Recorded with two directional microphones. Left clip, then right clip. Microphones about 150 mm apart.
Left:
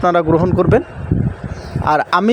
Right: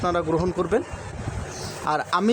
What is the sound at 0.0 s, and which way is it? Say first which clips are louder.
Speech: left 10 dB; 40° left (ahead or behind).